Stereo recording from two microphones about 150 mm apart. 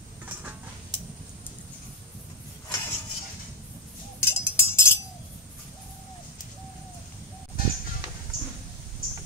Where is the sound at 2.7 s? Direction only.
15° left (ahead or behind).